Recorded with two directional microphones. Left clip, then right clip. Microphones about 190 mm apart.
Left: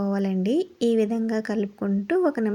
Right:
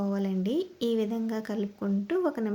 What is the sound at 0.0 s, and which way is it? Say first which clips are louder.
Speech: left 5 dB; 20° left (ahead or behind).